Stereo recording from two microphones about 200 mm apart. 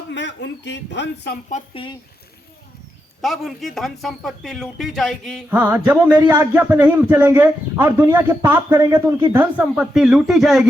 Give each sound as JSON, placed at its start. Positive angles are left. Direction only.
{"t": 0.1, "sound": "speech", "side_deg": 60}
{"t": 1.5, "sound": "speech", "side_deg": 35}
{"t": 3.2, "sound": "speech", "side_deg": 0}
{"t": 5.5, "sound": "speech", "side_deg": -10}